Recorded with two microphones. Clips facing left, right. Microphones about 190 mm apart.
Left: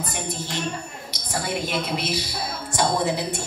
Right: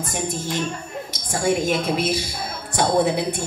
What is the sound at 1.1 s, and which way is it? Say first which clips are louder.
A woman's voice: right 6 dB; 45° right (ahead or behind).